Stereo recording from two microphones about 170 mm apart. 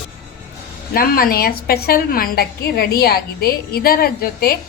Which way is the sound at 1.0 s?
60° left (ahead or behind).